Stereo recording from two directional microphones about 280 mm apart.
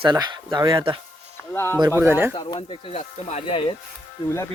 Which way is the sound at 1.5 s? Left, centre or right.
Centre.